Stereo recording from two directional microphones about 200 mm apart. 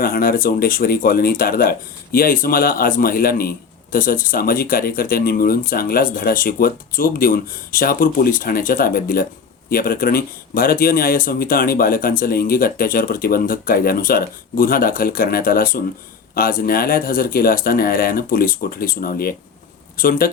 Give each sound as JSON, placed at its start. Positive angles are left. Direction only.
{"t": 0.0, "sound": "speech", "side_deg": 45}